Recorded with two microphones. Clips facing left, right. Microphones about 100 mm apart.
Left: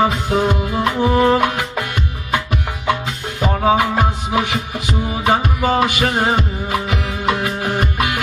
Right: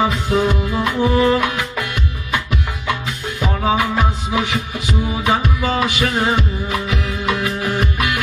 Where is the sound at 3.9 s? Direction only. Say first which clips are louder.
Left 1 dB; 55° left (ahead or behind).